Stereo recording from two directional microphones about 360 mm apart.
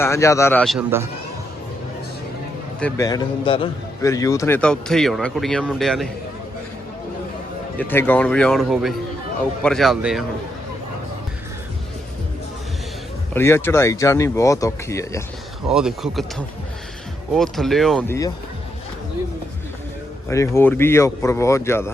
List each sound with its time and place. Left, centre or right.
0.0 s a man's voice: centre
2.8 s a man's voice: centre
7.8 s a man's voice: centre
13.3 s a man's voice: centre
17.3 s a man's voice: centre
20.3 s speech: centre